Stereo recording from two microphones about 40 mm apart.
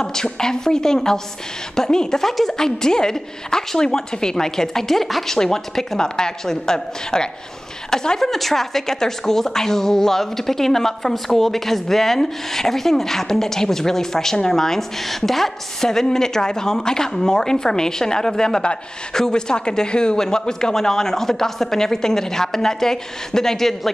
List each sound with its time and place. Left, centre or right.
0.0 s a woman's voice: centre
8.2 s a woman's voice: centre